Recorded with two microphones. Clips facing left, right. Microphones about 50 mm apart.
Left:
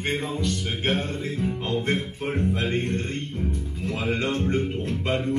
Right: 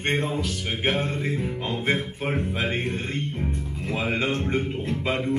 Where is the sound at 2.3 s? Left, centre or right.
Centre.